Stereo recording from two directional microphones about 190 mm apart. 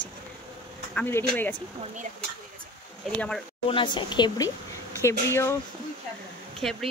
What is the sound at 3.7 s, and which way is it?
A woman's voice, 25° left (ahead or behind).